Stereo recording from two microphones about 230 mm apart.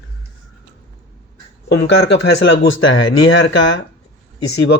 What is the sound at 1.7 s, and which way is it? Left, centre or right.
Speech, left.